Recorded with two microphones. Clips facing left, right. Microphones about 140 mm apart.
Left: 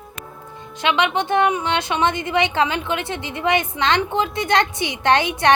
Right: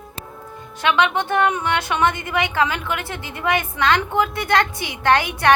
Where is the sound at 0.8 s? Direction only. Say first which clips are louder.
Right 1 dB; 20° left (ahead or behind).